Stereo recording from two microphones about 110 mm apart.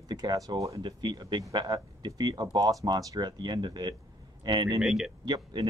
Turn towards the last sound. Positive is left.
turn(degrees=-40)  # may be behind; listen again after turning